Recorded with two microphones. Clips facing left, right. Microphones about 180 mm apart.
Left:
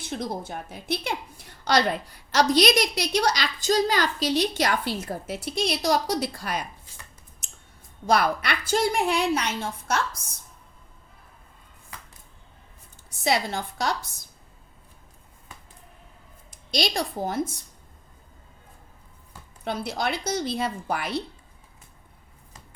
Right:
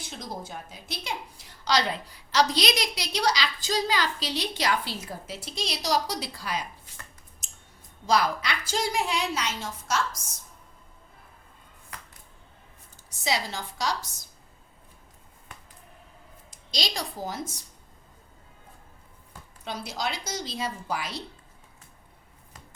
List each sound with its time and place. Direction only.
0.0 s a woman's voice: 60° left (ahead or behind)
7.4 s scissors: 60° left (ahead or behind)
8.0 s a woman's voice: 60° left (ahead or behind)
13.1 s a woman's voice: 55° left (ahead or behind)
16.5 s a woman's voice: 55° left (ahead or behind)
19.6 s a woman's voice: 55° left (ahead or behind)